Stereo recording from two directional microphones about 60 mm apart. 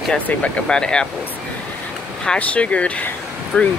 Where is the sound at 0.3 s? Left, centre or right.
Centre.